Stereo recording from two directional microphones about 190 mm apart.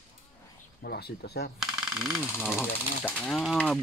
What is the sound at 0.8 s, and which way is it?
Speech, 55° left (ahead or behind).